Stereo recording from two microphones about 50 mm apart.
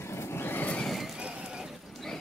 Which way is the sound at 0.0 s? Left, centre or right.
Left.